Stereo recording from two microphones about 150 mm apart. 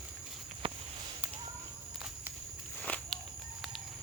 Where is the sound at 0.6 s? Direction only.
40° right (ahead or behind).